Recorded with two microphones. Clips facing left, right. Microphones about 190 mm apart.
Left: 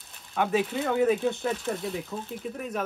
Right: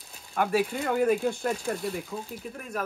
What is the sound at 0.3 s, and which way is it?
Speech, centre (ahead or behind).